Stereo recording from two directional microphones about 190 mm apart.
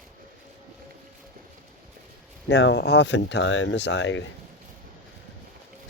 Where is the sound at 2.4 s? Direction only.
65° left (ahead or behind).